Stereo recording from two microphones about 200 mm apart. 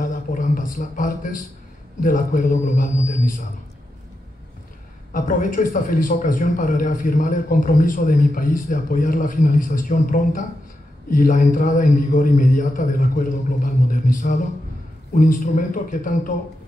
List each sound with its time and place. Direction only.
0.0 s a sound: 40° left (ahead or behind)
2.0 s speech: 40° left (ahead or behind)
5.1 s a man's voice: 40° left (ahead or behind)